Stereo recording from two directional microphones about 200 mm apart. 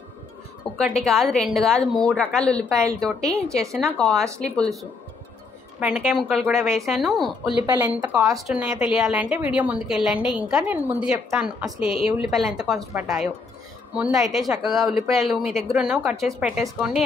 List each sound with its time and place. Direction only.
0.7 s a woman's voice: 5° left (ahead or behind)
2.8 s speech: 15° right (ahead or behind)
3.7 s a woman's voice: centre (ahead or behind)
7.6 s speech: 15° right (ahead or behind)
8.5 s a woman's voice: 5° right (ahead or behind)